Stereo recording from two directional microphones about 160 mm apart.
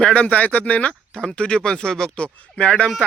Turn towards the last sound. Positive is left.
turn(degrees=5)  # may be behind; listen again after turning